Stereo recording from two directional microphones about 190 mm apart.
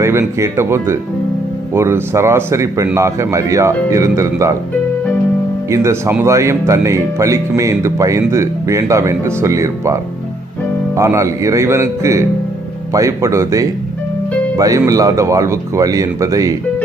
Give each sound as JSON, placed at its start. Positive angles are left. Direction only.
{"t": 0.0, "sound": "a man's voice", "side_deg": -15}
{"t": 5.6, "sound": "a man's voice", "side_deg": -15}